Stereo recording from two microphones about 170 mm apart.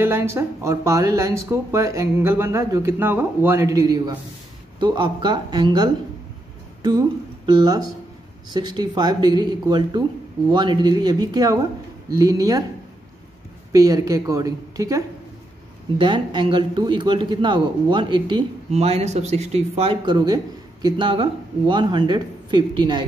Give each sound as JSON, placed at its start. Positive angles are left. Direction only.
{"t": 0.0, "sound": "speech", "side_deg": -15}
{"t": 13.7, "sound": "speech", "side_deg": -20}
{"t": 18.7, "sound": "speech", "side_deg": -40}